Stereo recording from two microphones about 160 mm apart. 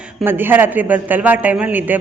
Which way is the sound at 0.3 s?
15° right (ahead or behind).